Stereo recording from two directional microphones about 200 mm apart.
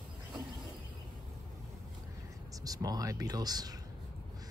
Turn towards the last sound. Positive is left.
turn(degrees=-20)  # may be behind; listen again after turning